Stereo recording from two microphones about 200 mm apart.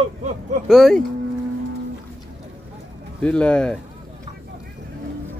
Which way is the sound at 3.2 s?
5° left (ahead or behind).